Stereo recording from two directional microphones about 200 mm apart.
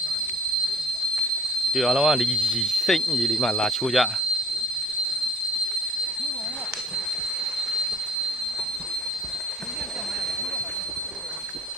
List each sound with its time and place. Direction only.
1.7 s speech: centre (ahead or behind)